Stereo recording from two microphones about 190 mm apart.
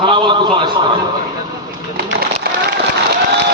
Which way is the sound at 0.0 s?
25° right (ahead or behind).